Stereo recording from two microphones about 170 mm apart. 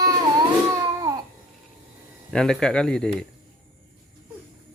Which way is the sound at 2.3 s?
5° left (ahead or behind).